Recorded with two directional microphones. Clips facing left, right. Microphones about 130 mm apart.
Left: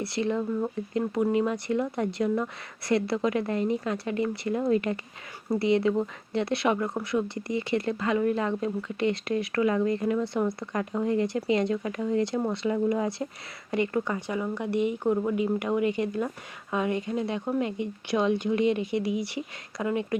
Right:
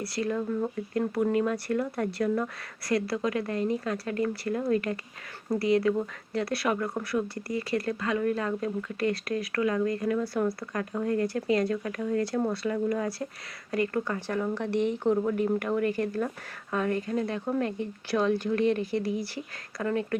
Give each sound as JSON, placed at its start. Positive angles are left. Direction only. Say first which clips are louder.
{"t": 0.0, "sound": "speech", "louder": "left 2 dB", "side_deg": 25}